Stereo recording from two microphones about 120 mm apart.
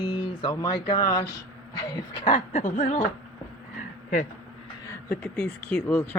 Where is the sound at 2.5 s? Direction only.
80° left.